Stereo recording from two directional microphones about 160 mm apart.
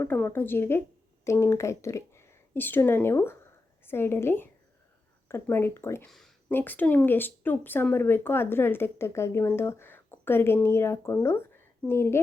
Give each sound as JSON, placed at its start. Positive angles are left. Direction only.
{"t": 0.0, "sound": "speech", "side_deg": 10}
{"t": 6.1, "sound": "speech", "side_deg": 0}